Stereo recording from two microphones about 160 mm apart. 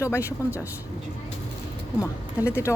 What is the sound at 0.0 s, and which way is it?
Speech, 15° left (ahead or behind).